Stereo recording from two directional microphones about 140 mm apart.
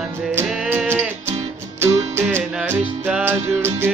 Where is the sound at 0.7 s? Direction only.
15° right (ahead or behind).